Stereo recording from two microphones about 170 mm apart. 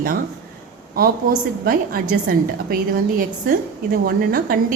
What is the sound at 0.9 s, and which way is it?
A woman's voice, 60° right (ahead or behind).